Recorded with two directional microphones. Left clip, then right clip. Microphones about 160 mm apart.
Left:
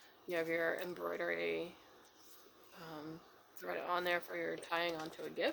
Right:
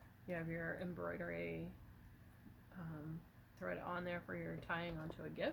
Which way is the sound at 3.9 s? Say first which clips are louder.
Left 8 dB; 90° left.